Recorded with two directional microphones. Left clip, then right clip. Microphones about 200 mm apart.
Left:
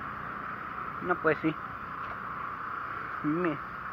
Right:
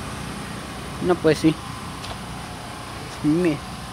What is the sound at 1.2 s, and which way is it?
Speech, 30° right (ahead or behind).